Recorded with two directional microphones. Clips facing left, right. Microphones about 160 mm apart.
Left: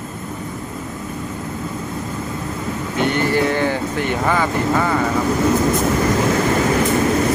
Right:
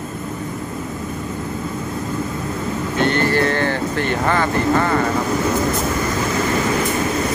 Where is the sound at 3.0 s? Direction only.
15° left (ahead or behind).